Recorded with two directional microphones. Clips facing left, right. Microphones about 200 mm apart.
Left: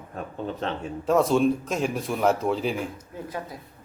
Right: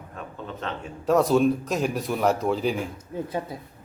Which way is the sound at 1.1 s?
Centre (ahead or behind).